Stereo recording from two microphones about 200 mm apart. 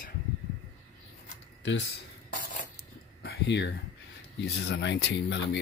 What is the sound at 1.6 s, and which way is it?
Speech, 60° left (ahead or behind).